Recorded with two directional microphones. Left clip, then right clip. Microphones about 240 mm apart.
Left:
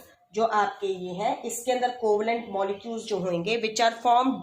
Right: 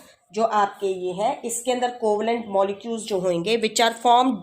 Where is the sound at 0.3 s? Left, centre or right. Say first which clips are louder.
Right 3 dB; right.